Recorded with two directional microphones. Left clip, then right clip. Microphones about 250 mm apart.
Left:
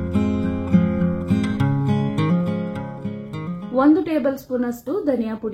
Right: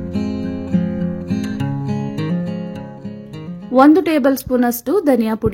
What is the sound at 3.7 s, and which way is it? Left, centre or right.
A woman's voice, right.